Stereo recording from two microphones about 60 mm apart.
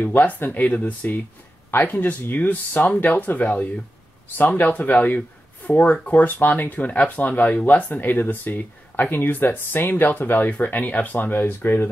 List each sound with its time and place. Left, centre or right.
0.0 s speech: left